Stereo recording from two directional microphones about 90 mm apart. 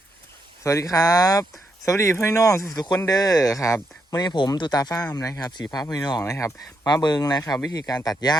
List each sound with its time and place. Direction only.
0.6 s speech: 35° left (ahead or behind)